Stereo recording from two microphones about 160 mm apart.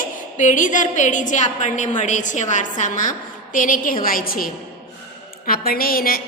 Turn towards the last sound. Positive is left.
turn(degrees=65)  # may be behind; listen again after turning